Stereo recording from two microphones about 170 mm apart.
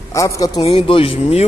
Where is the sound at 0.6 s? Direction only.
35° left (ahead or behind).